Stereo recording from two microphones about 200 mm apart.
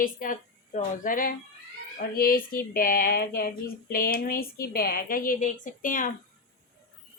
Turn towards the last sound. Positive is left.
turn(degrees=40)  # may be behind; listen again after turning